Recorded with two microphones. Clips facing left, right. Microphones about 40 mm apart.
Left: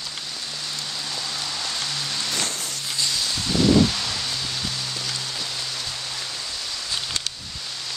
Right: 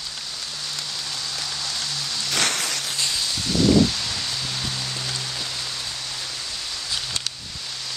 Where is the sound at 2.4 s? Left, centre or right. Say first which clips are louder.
Right 5 dB; right.